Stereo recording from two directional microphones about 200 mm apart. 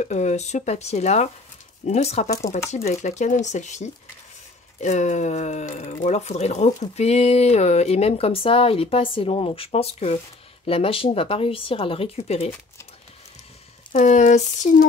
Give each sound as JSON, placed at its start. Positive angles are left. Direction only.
{"t": 0.0, "sound": "speech", "side_deg": 35}
{"t": 13.9, "sound": "speech", "side_deg": 35}